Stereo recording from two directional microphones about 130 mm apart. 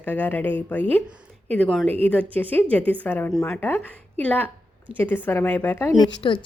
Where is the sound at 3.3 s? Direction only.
5° left (ahead or behind).